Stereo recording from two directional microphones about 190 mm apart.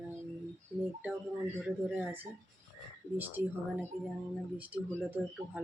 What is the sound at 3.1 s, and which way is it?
Speech, 10° right (ahead or behind).